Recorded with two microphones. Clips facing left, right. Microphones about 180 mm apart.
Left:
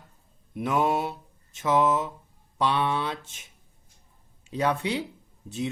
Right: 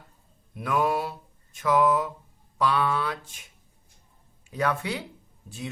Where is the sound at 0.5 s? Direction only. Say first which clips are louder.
Left 1 dB; 25° left (ahead or behind).